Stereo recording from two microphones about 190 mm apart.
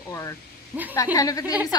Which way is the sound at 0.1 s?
15° left (ahead or behind).